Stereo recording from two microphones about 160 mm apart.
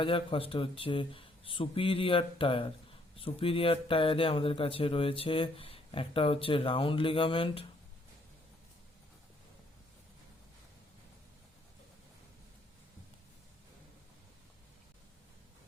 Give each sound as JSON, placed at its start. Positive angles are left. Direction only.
{"t": 0.0, "sound": "speech", "side_deg": 35}